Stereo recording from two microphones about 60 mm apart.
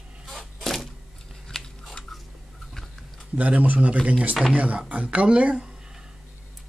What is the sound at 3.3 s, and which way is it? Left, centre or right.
Speech, right.